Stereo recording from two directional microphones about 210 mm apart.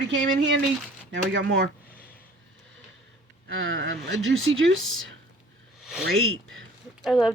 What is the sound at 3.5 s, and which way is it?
Speech, 65° right (ahead or behind).